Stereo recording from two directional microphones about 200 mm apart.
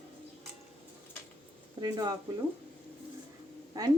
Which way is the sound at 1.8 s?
20° right (ahead or behind).